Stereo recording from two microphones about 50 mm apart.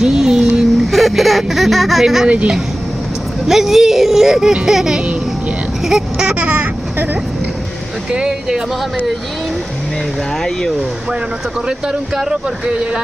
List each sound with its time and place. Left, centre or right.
0.0 s speech: centre
0.9 s speech: centre
2.2 s speech: right
3.4 s speech: centre
6.4 s speech: right
8.1 s speech: centre
12.6 s speech: right